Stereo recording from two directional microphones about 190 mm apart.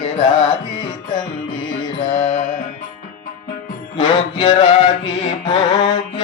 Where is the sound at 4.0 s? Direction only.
25° left (ahead or behind).